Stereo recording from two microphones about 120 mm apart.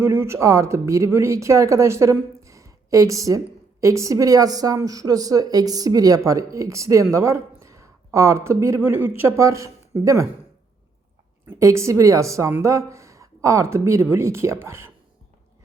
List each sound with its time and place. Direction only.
0.0 s speech: 20° right (ahead or behind)
11.4 s speech: 25° right (ahead or behind)